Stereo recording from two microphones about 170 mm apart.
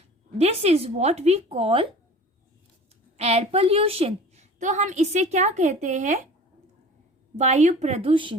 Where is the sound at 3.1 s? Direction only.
40° right (ahead or behind).